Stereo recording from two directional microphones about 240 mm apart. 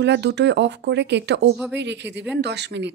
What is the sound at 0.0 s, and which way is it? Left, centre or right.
Speech, right.